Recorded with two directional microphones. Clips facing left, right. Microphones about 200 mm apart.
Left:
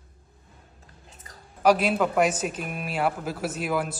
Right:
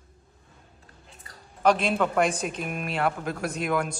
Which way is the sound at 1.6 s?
10° left (ahead or behind).